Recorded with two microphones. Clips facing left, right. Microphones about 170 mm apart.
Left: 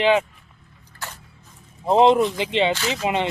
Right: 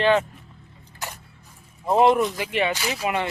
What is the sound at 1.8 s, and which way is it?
Speech, 25° left (ahead or behind).